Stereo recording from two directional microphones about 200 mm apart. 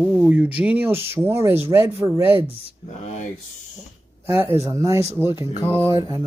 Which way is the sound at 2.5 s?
35° left (ahead or behind).